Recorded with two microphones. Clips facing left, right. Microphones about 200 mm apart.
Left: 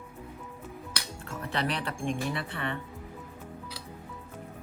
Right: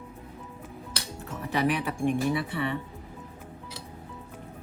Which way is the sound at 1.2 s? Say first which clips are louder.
Right 5 dB; 10° right (ahead or behind).